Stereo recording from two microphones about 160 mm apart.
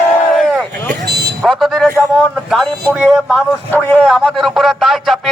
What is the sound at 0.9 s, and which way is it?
Vehicle, 85° right.